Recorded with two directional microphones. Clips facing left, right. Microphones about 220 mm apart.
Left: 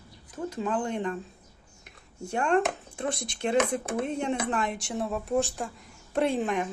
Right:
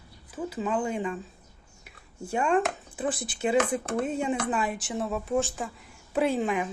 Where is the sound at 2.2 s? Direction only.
5° right (ahead or behind).